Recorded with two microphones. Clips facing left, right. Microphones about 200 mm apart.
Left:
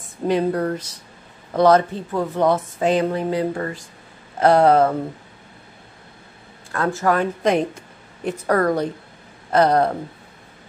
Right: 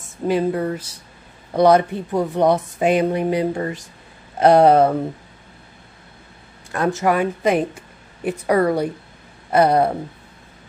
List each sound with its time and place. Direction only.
0.0 s speech: 5° right (ahead or behind)
6.7 s speech: 20° right (ahead or behind)